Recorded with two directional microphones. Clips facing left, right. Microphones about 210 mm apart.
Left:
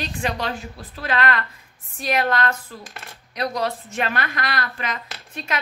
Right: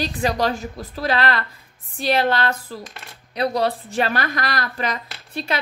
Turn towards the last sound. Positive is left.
turn(degrees=-35)  # may be behind; listen again after turning